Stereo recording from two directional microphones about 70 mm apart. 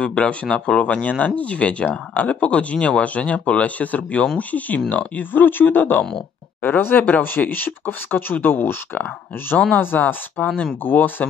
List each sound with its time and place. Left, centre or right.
0.0 s speech: centre
9.9 s speech: centre